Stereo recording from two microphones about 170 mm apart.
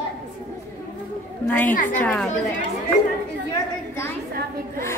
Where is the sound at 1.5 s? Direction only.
10° left (ahead or behind).